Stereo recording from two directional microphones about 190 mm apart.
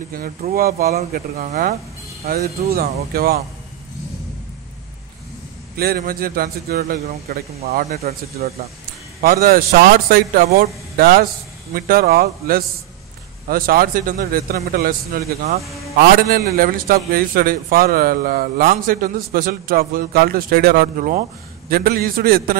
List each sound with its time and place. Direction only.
0.6 s a man's voice: 50° right (ahead or behind)
2.2 s a man's voice: 55° right (ahead or behind)
5.8 s a man's voice: 55° right (ahead or behind)
7.9 s a man's voice: 35° right (ahead or behind)
9.2 s a man's voice: 50° right (ahead or behind)